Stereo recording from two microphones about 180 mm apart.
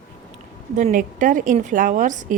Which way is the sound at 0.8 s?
50° right (ahead or behind).